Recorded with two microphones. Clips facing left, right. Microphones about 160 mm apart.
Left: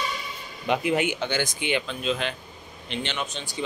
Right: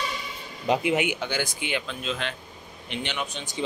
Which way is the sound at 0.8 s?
15° right (ahead or behind).